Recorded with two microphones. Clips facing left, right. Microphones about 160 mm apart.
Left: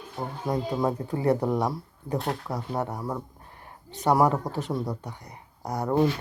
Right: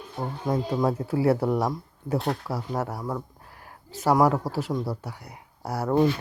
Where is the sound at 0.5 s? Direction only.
10° left (ahead or behind).